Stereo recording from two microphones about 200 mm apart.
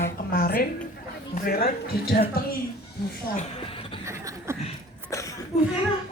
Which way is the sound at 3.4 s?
25° left (ahead or behind).